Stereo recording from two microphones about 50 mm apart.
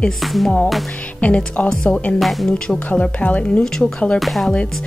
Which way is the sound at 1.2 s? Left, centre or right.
Left.